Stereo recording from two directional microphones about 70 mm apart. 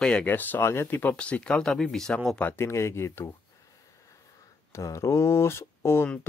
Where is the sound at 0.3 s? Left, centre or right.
Left.